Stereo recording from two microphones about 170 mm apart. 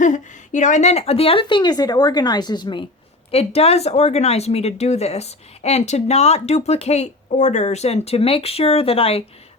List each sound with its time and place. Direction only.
0.0 s a woman's voice: 45° left (ahead or behind); by 2.8 s 25° left (ahead or behind)
3.3 s speech: 35° left (ahead or behind)